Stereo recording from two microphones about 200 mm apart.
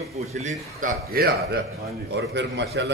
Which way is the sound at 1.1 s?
50° right (ahead or behind).